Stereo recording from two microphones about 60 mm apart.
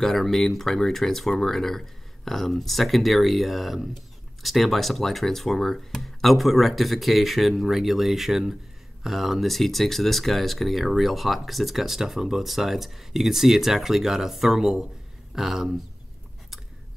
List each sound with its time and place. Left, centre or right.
0.0 s speech: centre